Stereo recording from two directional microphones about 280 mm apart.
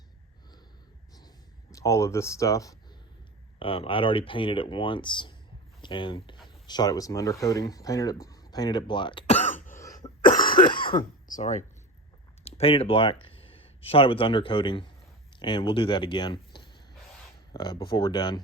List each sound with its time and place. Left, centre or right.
1.7 s speech: centre; by 9.7 s left
9.7 s cough: centre
10.2 s cough: left
10.6 s throat clearing: centre
10.9 s speech: left